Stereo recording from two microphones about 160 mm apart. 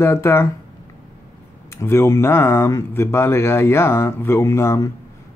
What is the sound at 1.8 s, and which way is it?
Speech, 15° left (ahead or behind).